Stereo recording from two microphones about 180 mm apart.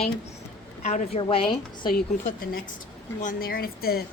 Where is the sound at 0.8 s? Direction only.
40° left (ahead or behind).